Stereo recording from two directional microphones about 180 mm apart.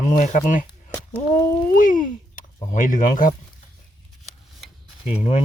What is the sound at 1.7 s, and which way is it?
Speech, 50° left (ahead or behind).